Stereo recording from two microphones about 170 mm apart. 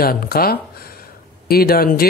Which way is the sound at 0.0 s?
60° left (ahead or behind).